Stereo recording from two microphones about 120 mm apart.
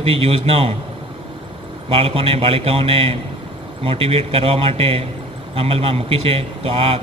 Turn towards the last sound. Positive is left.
turn(degrees=-50)  # may be behind; listen again after turning